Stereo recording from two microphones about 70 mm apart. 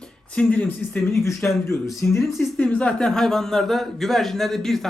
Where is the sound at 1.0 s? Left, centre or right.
Left.